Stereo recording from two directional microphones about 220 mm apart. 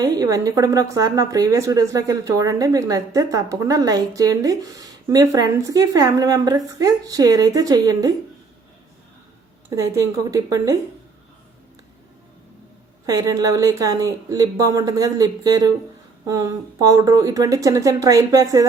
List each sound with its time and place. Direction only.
0.0 s a woman's voice: 15° right (ahead or behind)
9.6 s a woman's voice: 15° right (ahead or behind)
13.1 s a woman's voice: 15° right (ahead or behind)